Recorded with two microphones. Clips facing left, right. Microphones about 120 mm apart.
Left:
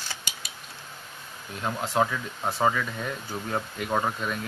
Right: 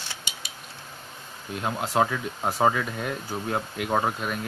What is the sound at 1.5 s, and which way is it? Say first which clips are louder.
Speech: right 1 dB; 10° right (ahead or behind).